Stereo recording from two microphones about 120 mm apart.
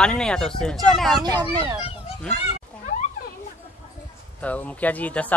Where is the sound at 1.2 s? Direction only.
35° right (ahead or behind).